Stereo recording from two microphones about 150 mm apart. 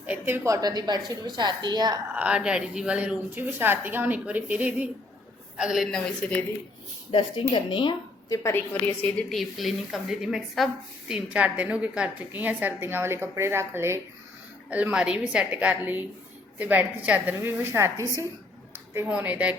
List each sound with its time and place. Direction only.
0.0 s a woman's voice: 10° right (ahead or behind); by 2.0 s 30° right (ahead or behind)
2.1 s a woman's voice: 5° right (ahead or behind)
7.1 s a woman's voice: 30° left (ahead or behind)
8.4 s a woman's voice: 10° left (ahead or behind)
9.3 s a woman's voice: centre (ahead or behind)